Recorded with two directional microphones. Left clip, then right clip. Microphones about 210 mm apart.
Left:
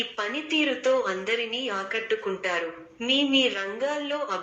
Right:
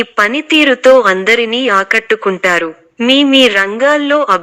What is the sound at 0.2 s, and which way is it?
A woman's voice, 45° right (ahead or behind).